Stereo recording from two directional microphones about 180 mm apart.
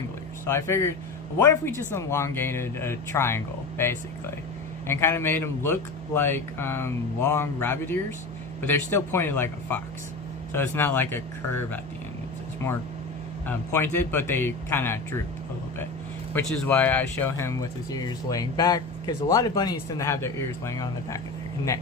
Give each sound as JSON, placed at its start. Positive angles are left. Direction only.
{"t": 0.4, "sound": "speech", "side_deg": 15}
{"t": 13.5, "sound": "speech", "side_deg": 10}
{"t": 16.3, "sound": "speech", "side_deg": 10}